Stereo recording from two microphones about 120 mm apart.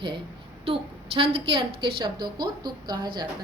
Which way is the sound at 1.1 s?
45° right (ahead or behind).